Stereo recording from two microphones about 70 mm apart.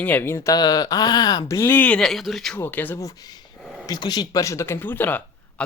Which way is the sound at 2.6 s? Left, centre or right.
Left.